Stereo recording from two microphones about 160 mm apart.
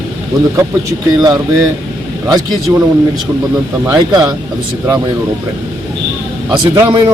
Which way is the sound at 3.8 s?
25° right (ahead or behind).